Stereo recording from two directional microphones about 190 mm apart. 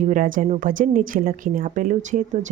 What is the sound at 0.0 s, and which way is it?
Speech, 45° right (ahead or behind).